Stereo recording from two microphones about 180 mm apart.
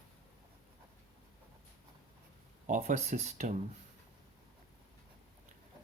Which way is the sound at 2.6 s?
45° right (ahead or behind).